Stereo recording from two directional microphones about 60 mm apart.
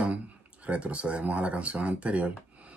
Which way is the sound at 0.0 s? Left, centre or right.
Right.